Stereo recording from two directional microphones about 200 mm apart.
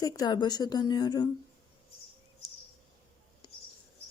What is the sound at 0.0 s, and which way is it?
A woman's voice, 20° left (ahead or behind).